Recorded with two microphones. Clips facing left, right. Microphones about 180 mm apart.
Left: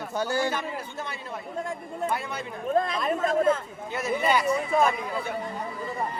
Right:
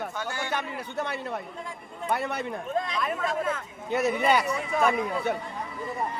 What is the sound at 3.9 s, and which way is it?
Speech, 65° right (ahead or behind).